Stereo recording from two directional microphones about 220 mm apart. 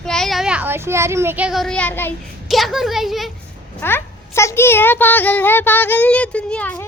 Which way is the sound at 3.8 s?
10° left (ahead or behind).